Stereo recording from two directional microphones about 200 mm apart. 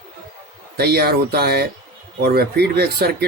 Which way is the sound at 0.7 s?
50° right (ahead or behind).